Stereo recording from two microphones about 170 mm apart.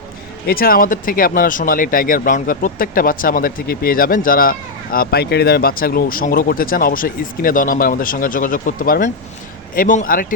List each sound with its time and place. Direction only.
0.4 s a man's voice: 60° left (ahead or behind)